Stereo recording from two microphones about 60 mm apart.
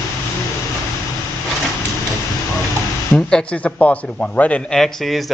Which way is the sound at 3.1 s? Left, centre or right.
Centre.